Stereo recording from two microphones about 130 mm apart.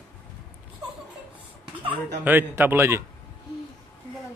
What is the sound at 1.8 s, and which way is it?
Speech, 15° right (ahead or behind).